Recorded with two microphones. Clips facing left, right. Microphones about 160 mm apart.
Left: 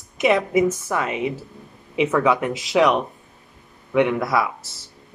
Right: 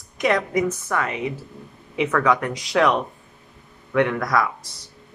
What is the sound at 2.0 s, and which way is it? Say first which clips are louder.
Speech: left 1 dB; 10° left (ahead or behind).